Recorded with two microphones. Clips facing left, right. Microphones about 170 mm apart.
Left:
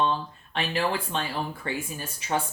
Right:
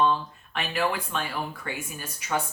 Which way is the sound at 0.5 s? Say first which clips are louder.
Even; 30° left (ahead or behind).